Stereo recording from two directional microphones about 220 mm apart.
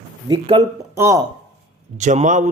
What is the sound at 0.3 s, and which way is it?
Speech, 25° right (ahead or behind).